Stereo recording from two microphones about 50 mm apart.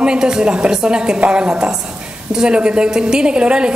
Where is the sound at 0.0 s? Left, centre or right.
Centre.